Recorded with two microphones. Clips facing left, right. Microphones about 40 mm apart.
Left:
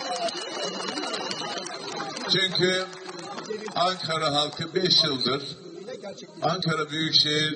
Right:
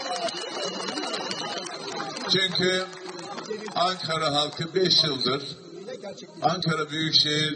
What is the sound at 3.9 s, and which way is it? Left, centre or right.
Speech, left.